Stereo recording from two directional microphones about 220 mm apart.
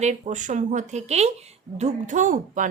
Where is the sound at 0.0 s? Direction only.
30° right (ahead or behind).